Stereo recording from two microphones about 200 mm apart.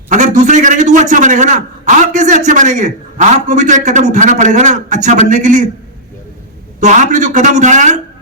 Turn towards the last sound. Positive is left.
turn(degrees=-40)  # may be behind; listen again after turning